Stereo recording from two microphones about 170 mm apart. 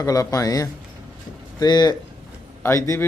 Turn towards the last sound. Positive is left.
turn(degrees=15)  # may be behind; listen again after turning